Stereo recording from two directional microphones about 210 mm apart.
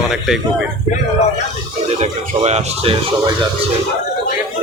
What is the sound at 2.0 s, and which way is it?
Speech, 30° right (ahead or behind).